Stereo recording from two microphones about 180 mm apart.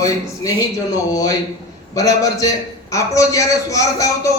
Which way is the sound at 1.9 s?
20° left (ahead or behind).